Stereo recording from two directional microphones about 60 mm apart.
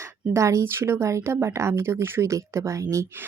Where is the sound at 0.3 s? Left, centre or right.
Right.